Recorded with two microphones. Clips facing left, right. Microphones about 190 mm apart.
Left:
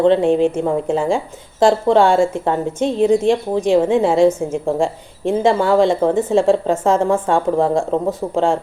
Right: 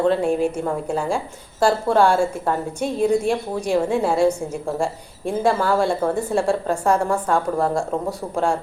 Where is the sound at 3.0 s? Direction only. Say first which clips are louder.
Left 5 dB; 90° left.